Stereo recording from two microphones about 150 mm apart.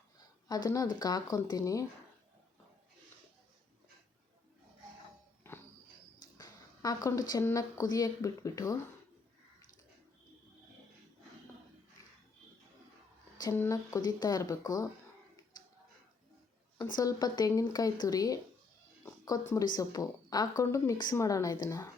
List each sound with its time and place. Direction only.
0.4 s a woman's voice: 25° left (ahead or behind)
5.5 s music: 15° left (ahead or behind)
6.3 s speech: 25° left (ahead or behind)
13.4 s a woman's voice: 20° left (ahead or behind)
16.9 s a woman's voice: 25° left (ahead or behind)